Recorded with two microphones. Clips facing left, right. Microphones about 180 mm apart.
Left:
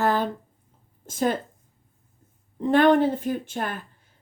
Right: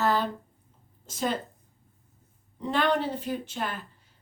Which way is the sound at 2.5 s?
50° left (ahead or behind).